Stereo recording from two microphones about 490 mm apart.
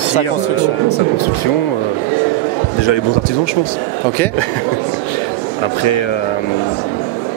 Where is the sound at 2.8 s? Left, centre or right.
Left.